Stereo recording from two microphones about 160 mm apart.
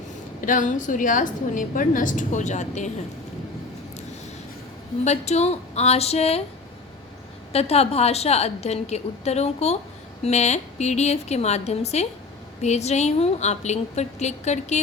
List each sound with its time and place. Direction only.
0.4 s a woman's voice: 55° left (ahead or behind)
5.0 s a woman's voice: 45° left (ahead or behind)
7.5 s a woman's voice: 40° left (ahead or behind)